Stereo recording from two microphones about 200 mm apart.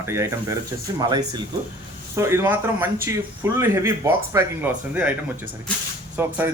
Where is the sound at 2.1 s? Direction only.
15° right (ahead or behind).